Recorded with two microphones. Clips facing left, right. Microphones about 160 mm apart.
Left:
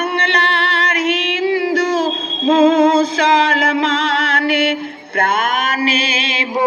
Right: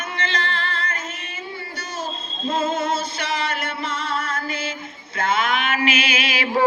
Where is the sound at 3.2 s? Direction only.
90° left.